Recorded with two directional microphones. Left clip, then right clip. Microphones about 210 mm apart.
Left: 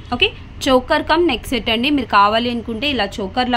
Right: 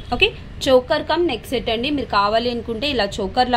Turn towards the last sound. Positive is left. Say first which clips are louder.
# right 1 dB
turn(degrees=5)  # may be behind; listen again after turning